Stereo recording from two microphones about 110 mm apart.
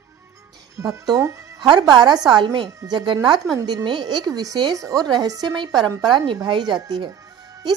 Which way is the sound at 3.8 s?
45° right (ahead or behind).